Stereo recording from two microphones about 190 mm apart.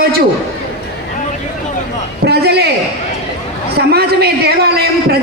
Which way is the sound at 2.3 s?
60° right (ahead or behind).